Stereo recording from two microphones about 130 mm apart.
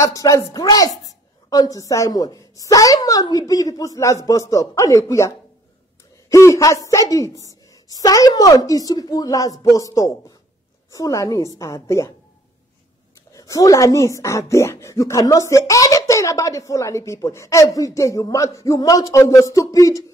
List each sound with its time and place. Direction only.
0.0 s speech: 25° left (ahead or behind)
13.3 s speech: 25° left (ahead or behind)